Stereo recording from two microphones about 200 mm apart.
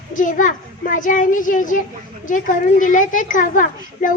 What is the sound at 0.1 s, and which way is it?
A woman's voice, 40° left (ahead or behind).